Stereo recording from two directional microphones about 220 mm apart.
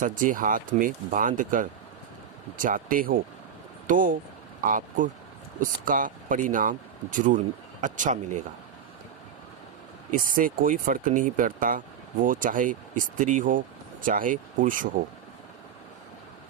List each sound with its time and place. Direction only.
0.0 s speech: 35° right (ahead or behind)
10.1 s speech: 40° right (ahead or behind)